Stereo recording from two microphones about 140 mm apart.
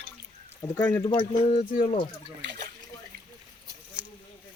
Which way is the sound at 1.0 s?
30° left (ahead or behind).